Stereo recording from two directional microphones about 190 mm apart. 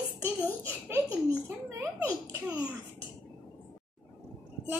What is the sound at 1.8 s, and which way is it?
Speech, 15° right (ahead or behind).